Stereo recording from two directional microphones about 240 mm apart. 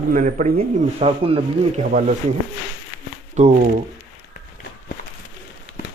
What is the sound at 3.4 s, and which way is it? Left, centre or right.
Speech, right.